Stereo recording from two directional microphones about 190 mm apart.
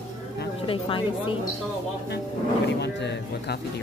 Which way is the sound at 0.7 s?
25° left (ahead or behind).